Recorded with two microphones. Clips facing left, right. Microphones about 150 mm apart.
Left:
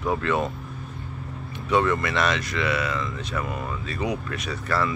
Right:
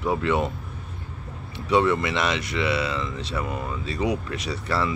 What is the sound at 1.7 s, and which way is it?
Speech, 20° right (ahead or behind).